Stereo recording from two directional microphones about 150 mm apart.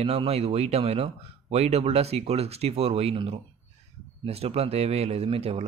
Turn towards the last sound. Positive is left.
turn(degrees=-40)  # may be behind; listen again after turning